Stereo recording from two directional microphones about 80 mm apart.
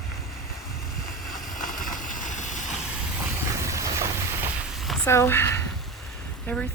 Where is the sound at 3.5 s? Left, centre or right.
Right.